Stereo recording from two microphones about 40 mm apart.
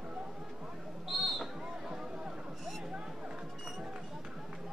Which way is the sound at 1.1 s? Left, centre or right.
Centre.